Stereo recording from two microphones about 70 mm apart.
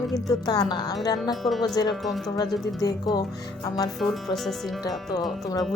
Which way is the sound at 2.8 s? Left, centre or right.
Left.